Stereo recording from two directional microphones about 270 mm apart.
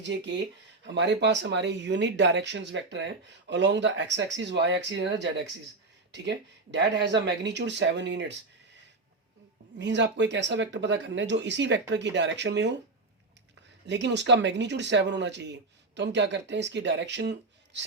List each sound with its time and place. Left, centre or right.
0.0 s speech: right
9.7 s speech: right
13.8 s speech: right